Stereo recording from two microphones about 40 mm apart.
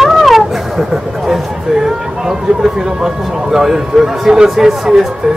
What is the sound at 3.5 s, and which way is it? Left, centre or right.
Speech, centre.